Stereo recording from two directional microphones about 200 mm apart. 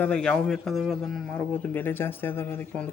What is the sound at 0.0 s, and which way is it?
A man's voice, 5° left (ahead or behind).